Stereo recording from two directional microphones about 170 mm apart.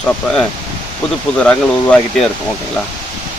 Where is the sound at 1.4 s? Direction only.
5° left (ahead or behind).